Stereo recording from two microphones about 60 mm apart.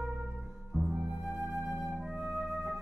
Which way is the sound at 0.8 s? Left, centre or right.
Centre.